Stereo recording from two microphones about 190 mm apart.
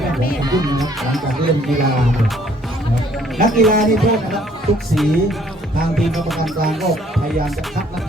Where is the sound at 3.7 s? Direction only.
45° right (ahead or behind).